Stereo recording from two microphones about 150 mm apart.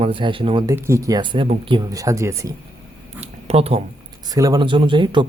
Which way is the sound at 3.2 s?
45° right (ahead or behind).